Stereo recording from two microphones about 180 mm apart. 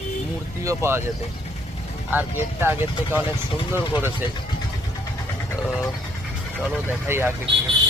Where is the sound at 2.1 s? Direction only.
10° right (ahead or behind).